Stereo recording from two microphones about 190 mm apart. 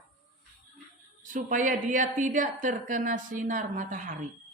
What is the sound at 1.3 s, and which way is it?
Speech, 45° right (ahead or behind).